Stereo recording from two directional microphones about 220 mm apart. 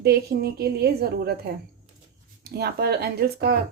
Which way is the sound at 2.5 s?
45° right (ahead or behind).